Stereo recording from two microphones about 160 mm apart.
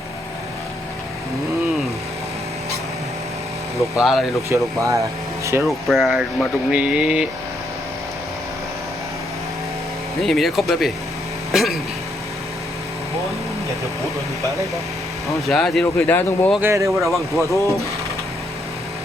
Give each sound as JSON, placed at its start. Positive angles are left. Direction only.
{"t": 3.8, "sound": "speech", "side_deg": 0}
{"t": 4.4, "sound": "speech", "side_deg": -20}
{"t": 5.6, "sound": "speech", "side_deg": 0}
{"t": 10.2, "sound": "speech", "side_deg": 0}
{"t": 15.4, "sound": "speech", "side_deg": 0}
{"t": 16.6, "sound": "speech", "side_deg": -15}
{"t": 17.0, "sound": "speech", "side_deg": 0}
{"t": 17.5, "sound": "speech", "side_deg": 20}